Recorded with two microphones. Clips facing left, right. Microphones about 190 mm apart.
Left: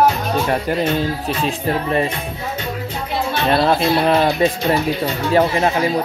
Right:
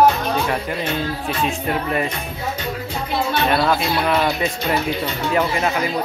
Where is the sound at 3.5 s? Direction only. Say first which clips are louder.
Left 7 dB; 30° left (ahead or behind).